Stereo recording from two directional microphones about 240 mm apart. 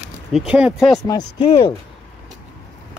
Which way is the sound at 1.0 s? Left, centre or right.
Centre.